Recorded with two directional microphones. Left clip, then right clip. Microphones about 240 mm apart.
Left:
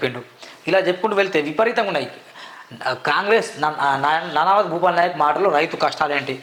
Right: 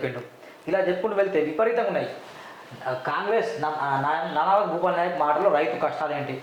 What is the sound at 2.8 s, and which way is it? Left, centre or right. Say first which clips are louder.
A man's voice: left 7 dB; left.